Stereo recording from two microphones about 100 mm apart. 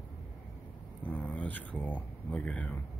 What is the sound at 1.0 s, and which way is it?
Speech, 15° left (ahead or behind).